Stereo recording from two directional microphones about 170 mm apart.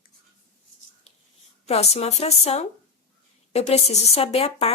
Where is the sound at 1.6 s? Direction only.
40° left (ahead or behind).